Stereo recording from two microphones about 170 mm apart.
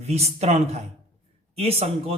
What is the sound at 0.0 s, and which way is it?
Speech, 40° right (ahead or behind).